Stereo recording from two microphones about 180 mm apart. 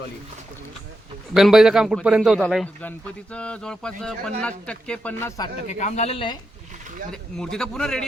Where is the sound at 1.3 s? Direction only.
Centre (ahead or behind); by 5.5 s 20° left (ahead or behind).